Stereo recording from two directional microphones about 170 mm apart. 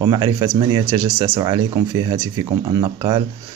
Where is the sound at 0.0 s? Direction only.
25° right (ahead or behind).